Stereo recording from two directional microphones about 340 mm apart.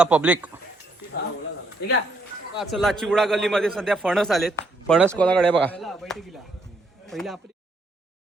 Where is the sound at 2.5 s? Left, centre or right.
Centre.